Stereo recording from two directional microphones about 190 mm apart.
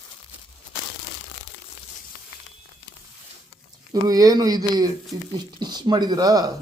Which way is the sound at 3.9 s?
20° right (ahead or behind).